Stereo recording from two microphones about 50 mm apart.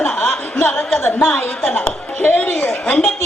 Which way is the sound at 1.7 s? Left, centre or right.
Left.